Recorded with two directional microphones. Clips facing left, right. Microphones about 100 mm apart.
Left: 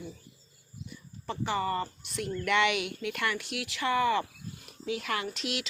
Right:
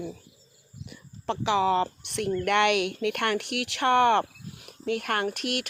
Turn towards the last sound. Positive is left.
turn(degrees=-60)  # may be behind; listen again after turning